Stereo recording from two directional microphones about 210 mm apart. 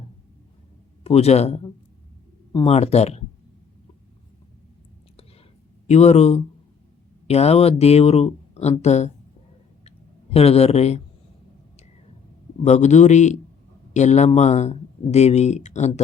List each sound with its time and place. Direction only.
1.0 s speech: 30° left (ahead or behind)
2.7 s speech: 30° left (ahead or behind)
5.9 s speech: 30° left (ahead or behind)
9.8 s a sound: 30° left (ahead or behind)
12.6 s speech: 35° left (ahead or behind)